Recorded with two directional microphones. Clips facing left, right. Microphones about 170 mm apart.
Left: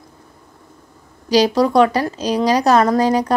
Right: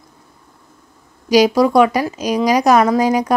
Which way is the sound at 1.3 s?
10° right (ahead or behind).